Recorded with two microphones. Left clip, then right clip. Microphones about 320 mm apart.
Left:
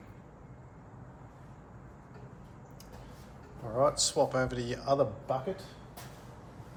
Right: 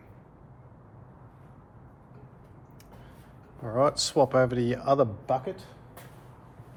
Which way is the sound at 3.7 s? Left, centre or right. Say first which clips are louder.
Right 4 dB; right.